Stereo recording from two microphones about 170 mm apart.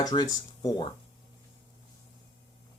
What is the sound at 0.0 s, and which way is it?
Speech, 20° left (ahead or behind).